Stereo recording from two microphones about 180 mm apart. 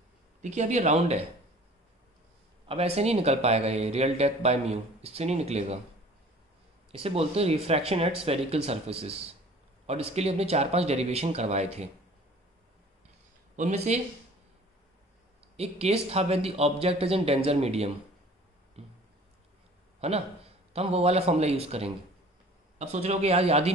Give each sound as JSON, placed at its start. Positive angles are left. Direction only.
{"t": 0.4, "sound": "speech", "side_deg": -40}
{"t": 2.7, "sound": "speech", "side_deg": -35}
{"t": 6.9, "sound": "speech", "side_deg": -35}
{"t": 13.6, "sound": "speech", "side_deg": -40}
{"t": 15.5, "sound": "speech", "side_deg": -35}
{"t": 18.8, "sound": "a sound", "side_deg": -35}
{"t": 20.0, "sound": "speech", "side_deg": -35}